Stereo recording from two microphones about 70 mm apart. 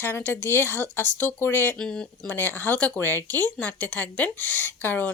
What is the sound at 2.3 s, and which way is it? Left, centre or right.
A woman's voice, left.